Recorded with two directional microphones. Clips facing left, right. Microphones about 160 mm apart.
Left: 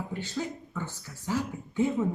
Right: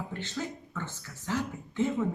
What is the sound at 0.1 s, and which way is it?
Speech, 10° left (ahead or behind).